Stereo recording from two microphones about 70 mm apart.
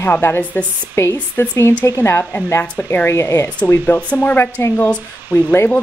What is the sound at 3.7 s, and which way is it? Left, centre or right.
Speech, left.